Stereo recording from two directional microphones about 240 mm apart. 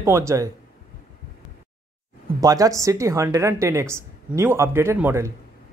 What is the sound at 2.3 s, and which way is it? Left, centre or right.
Speech, centre.